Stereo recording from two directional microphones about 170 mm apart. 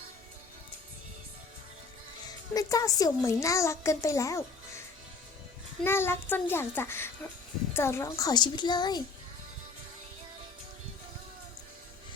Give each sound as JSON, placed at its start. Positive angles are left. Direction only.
{"t": 2.2, "sound": "a child's voice", "side_deg": 20}
{"t": 5.8, "sound": "a child's voice", "side_deg": 15}